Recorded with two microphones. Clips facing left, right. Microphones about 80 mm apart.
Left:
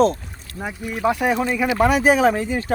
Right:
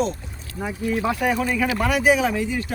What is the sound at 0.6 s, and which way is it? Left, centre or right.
Speech, centre.